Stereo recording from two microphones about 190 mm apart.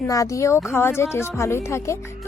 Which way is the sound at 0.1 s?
15° left (ahead or behind).